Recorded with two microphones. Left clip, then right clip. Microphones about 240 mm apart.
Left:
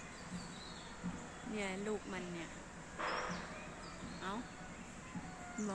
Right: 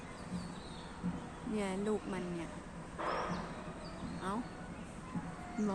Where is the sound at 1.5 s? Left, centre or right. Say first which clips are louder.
Right 4 dB; centre.